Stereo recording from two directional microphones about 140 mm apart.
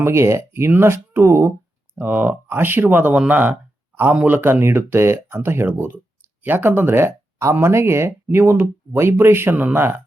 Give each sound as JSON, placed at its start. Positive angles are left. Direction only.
{"t": 0.0, "sound": "speech", "side_deg": -20}